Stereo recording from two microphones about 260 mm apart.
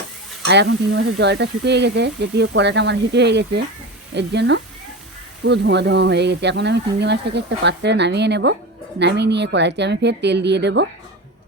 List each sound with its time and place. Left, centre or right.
0.4 s speech: right